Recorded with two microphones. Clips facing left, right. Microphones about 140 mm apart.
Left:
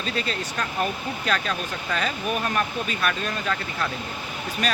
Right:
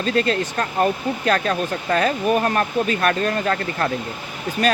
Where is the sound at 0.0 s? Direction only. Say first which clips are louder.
Right 9 dB; 50° right (ahead or behind).